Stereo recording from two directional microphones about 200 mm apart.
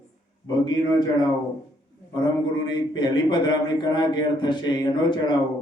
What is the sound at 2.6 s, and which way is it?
Speech, 20° left (ahead or behind).